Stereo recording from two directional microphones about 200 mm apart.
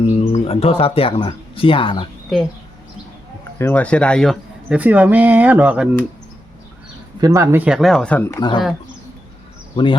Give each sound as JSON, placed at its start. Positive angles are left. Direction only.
{"t": 0.1, "sound": "speech", "side_deg": 30}
{"t": 3.6, "sound": "speech", "side_deg": 10}
{"t": 7.2, "sound": "speech", "side_deg": -15}
{"t": 9.7, "sound": "speech", "side_deg": 25}